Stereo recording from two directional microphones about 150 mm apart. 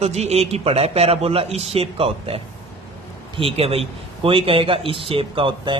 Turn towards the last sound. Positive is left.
turn(degrees=-35)  # may be behind; listen again after turning